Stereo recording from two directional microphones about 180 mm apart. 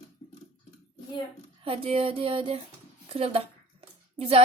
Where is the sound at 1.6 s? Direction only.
30° right (ahead or behind).